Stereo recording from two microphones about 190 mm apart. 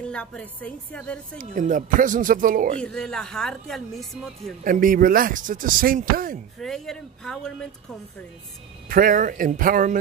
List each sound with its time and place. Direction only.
0.0 s speech: 5° left (ahead or behind)
1.4 s speech: 45° right (ahead or behind)
2.8 s speech: 5° left (ahead or behind)
4.6 s speech: 45° right (ahead or behind)
6.6 s speech: centre (ahead or behind)
8.8 s speech: 50° right (ahead or behind)